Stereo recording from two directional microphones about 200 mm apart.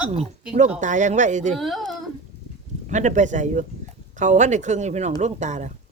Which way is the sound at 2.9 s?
35° right (ahead or behind).